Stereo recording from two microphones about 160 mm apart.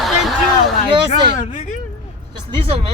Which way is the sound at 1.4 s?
50° left (ahead or behind).